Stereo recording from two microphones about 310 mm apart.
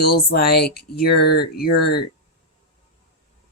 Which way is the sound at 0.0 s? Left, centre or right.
Left.